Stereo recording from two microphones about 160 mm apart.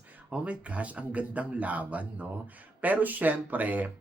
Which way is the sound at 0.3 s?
5° right (ahead or behind).